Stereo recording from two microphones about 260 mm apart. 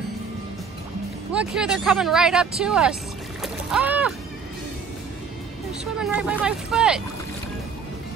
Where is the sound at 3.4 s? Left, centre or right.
Centre.